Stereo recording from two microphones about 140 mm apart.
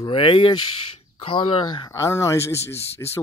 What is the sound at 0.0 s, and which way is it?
Speech, 40° left (ahead or behind).